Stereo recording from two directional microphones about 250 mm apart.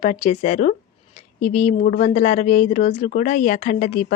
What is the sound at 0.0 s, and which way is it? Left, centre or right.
Speech, left.